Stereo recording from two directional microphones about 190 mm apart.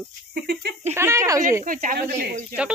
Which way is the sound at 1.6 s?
45° right (ahead or behind).